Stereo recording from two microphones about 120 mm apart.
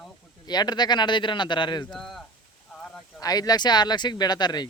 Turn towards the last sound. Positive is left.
turn(degrees=35)  # may be behind; listen again after turning